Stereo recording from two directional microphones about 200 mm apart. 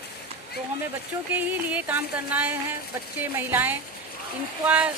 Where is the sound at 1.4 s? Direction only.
10° right (ahead or behind).